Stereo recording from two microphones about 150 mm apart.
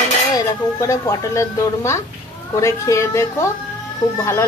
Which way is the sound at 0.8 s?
20° left (ahead or behind).